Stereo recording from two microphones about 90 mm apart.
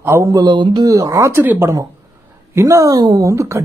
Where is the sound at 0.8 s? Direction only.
40° right (ahead or behind).